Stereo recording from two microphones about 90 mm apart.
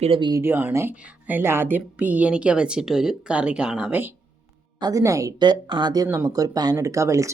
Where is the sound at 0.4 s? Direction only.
25° right (ahead or behind).